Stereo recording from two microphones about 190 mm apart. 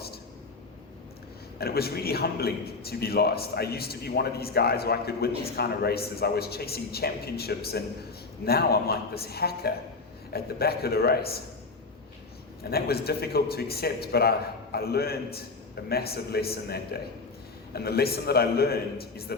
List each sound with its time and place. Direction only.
1.5 s a man's voice: 55° left (ahead or behind)
12.7 s a man's voice: 55° left (ahead or behind)